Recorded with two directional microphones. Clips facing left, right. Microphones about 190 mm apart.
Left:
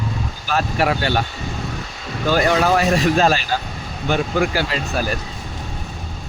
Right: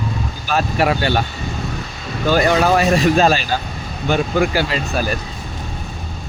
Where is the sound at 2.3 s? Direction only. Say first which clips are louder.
Right 2 dB; 20° right (ahead or behind).